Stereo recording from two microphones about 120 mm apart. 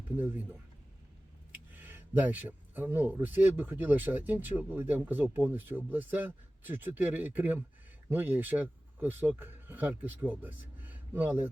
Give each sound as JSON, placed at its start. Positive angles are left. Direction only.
{"t": 0.2, "sound": "speech", "side_deg": -15}
{"t": 1.5, "sound": "speech", "side_deg": -15}